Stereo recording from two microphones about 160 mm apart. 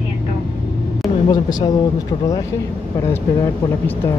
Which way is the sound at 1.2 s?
25° left (ahead or behind).